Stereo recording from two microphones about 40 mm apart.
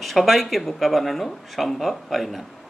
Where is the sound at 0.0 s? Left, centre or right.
Centre.